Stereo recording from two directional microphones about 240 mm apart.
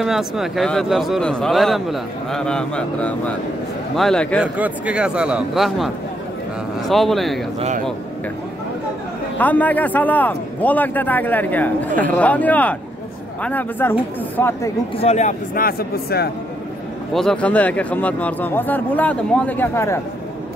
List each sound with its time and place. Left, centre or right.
0.0 s a man's voice: centre
6.9 s a man's voice: centre
9.4 s a man's voice: centre
15.0 s a man's voice: left
17.1 s a man's voice: centre